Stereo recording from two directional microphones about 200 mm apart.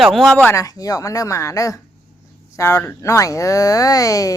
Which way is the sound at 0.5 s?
15° left (ahead or behind).